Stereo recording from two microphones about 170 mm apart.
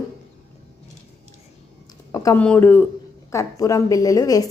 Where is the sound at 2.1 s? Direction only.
20° left (ahead or behind).